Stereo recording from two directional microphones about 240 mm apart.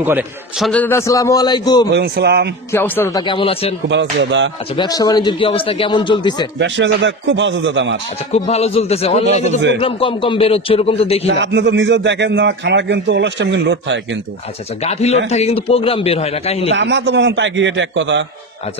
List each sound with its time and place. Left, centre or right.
0.0 s a man's voice: centre
0.7 s a man's voice: centre
1.9 s a man's voice: right
2.7 s a man's voice: centre
3.9 s a man's voice: right
4.7 s speech: centre
6.6 s a man's voice: right
8.3 s speech: left
11.2 s a man's voice: right
14.8 s speech: left
16.7 s a man's voice: right